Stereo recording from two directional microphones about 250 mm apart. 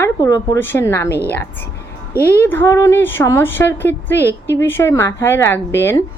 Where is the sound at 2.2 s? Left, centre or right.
Centre.